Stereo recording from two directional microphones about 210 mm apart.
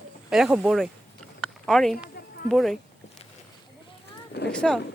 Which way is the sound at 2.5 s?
Centre (ahead or behind).